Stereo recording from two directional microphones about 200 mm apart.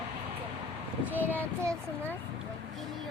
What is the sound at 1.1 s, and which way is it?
Child singing, 10° left (ahead or behind).